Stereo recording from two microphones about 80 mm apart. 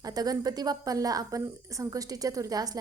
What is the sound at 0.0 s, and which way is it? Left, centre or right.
A woman's voice, right.